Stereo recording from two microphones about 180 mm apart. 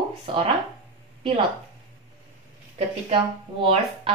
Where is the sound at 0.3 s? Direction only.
30° right (ahead or behind).